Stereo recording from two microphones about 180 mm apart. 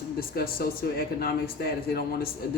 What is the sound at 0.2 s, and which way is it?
A man's voice, 55° left (ahead or behind).